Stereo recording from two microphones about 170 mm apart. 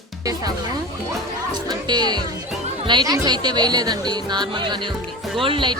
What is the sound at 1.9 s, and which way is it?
A child's voice, 25° right (ahead or behind).